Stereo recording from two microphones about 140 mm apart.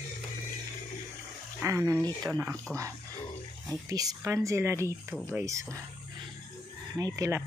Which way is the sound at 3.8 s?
25° right (ahead or behind).